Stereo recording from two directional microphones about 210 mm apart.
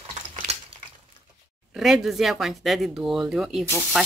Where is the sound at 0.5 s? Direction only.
30° right (ahead or behind).